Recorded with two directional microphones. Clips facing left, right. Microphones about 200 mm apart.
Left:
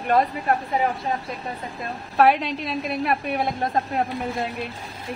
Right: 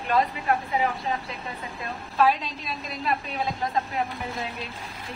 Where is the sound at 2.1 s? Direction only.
65° left (ahead or behind).